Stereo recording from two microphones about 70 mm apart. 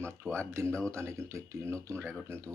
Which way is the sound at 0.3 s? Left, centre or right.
Right.